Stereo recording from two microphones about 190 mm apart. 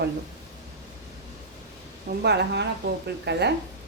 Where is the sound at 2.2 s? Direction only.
60° right (ahead or behind).